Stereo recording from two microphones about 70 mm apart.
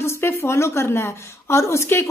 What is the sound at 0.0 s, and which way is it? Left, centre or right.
A woman's voice, left.